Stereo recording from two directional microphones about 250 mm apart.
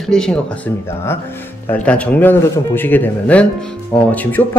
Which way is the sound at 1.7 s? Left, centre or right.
Centre.